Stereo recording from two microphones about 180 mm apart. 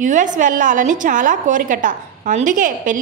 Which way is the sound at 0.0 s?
45° right (ahead or behind).